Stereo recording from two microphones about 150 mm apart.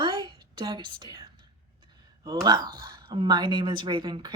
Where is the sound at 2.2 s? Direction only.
25° right (ahead or behind).